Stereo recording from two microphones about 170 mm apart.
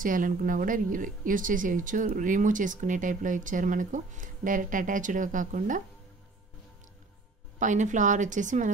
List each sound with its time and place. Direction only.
0.0 s speech: 50° right (ahead or behind)
7.5 s speech: 45° right (ahead or behind)